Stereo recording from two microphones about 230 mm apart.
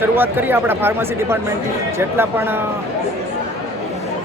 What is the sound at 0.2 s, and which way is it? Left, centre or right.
Speech, centre.